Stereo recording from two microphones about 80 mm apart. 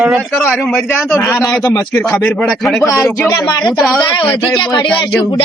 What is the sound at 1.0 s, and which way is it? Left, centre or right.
Speech, left.